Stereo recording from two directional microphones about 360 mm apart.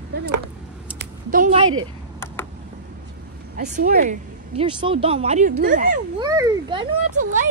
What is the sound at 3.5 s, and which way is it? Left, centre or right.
Speech, right.